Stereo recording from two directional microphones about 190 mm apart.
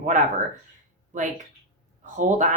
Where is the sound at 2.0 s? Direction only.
40° right (ahead or behind).